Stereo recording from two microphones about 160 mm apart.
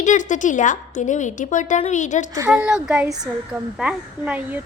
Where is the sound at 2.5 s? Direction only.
5° right (ahead or behind).